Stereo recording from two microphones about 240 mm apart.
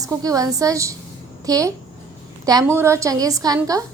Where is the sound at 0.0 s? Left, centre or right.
Centre.